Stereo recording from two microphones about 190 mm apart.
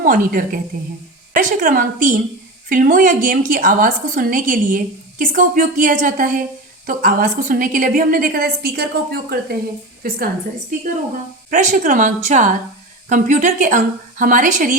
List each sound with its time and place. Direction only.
0.0 s a woman's voice: 45° right (ahead or behind)
11.5 s a woman's voice: 40° right (ahead or behind)